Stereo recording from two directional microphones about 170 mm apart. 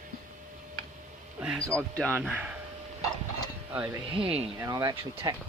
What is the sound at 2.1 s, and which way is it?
Speech, 5° right (ahead or behind).